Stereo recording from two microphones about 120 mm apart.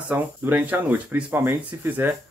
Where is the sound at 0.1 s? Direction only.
15° right (ahead or behind).